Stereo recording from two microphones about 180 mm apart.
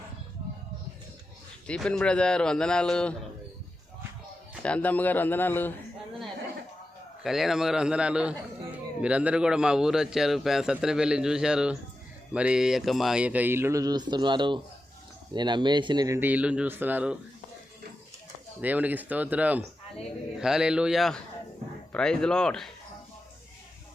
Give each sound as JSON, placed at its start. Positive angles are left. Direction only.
{"t": 1.6, "sound": "a man's voice", "side_deg": 5}
{"t": 4.6, "sound": "speech", "side_deg": 5}
{"t": 7.3, "sound": "a man's voice", "side_deg": 0}
{"t": 18.6, "sound": "a man's voice", "side_deg": -10}